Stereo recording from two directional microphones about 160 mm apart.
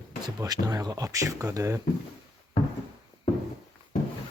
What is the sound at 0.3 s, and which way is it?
Speech, 25° right (ahead or behind).